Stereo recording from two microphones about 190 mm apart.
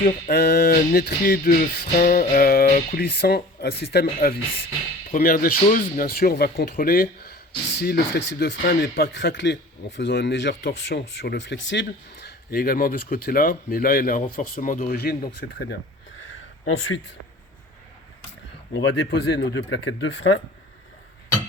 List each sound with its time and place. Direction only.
0.3 s music: 60° left (ahead or behind)
7.8 s speech: 65° left (ahead or behind)
11.1 s music: 65° left (ahead or behind)
16.3 s a sound: 90° left
18.7 s speech: 75° left (ahead or behind)